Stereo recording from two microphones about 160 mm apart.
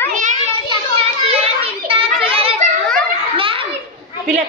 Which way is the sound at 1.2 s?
40° right (ahead or behind).